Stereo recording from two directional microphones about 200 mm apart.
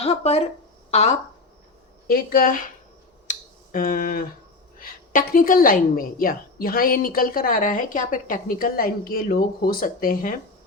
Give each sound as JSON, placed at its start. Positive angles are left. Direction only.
{"t": 0.0, "sound": "speech", "side_deg": 30}
{"t": 2.0, "sound": "a woman's voice", "side_deg": 45}
{"t": 3.2, "sound": "finger snapping", "side_deg": 45}
{"t": 4.8, "sound": "a woman's voice", "side_deg": 45}